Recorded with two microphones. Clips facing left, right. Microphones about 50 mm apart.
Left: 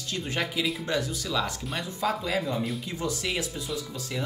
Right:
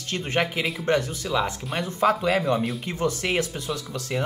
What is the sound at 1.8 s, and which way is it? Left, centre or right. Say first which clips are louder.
Speech: right 8 dB; right.